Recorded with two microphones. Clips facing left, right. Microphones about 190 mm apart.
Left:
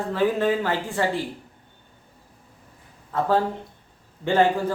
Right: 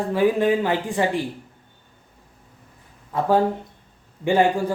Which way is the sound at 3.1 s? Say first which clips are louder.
Right 3 dB; 15° right (ahead or behind).